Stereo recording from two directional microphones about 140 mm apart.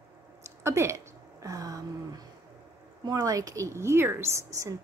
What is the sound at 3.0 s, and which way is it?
A woman's voice, 25° right (ahead or behind).